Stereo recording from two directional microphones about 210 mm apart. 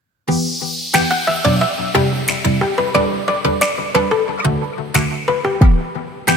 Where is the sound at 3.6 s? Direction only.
Centre (ahead or behind).